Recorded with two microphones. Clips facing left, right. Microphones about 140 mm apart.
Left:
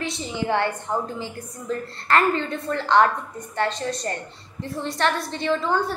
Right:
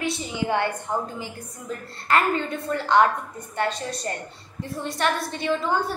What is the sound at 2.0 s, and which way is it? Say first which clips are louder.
A woman's voice: left 1 dB; 10° right (ahead or behind).